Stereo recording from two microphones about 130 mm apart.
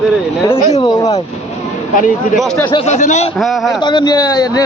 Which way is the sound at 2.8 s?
60° left (ahead or behind).